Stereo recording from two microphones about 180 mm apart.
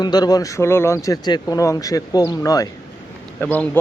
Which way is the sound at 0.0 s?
20° left (ahead or behind).